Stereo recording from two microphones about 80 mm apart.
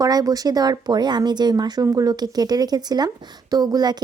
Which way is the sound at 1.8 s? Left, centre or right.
Right.